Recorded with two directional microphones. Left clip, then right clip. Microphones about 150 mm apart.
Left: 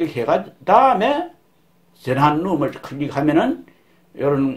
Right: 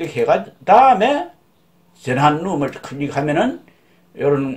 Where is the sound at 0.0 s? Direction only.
30° left (ahead or behind).